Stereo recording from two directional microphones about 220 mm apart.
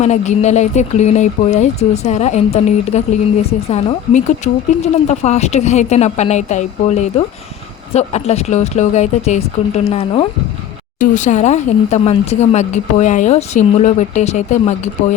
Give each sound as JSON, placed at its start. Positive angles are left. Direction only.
{"t": 0.0, "sound": "a woman's voice", "side_deg": 30}